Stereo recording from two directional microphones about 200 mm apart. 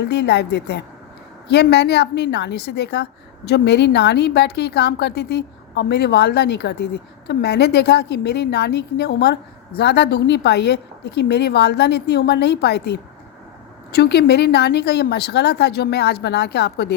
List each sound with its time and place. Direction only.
0.0 s a woman's voice: 55° left (ahead or behind)